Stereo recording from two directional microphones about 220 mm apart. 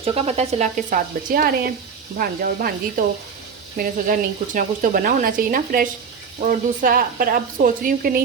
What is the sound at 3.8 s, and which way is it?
Stir, 45° right (ahead or behind).